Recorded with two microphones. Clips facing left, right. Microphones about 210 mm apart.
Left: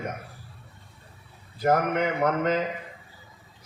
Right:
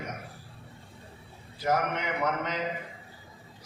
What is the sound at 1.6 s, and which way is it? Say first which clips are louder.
Speech: left 6 dB; 50° left (ahead or behind).